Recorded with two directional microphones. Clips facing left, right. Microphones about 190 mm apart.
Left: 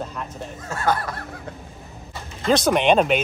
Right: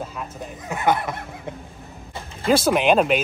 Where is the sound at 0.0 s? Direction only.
5° right (ahead or behind).